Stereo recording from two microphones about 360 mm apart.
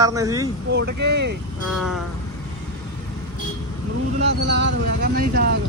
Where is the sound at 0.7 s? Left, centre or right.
Right.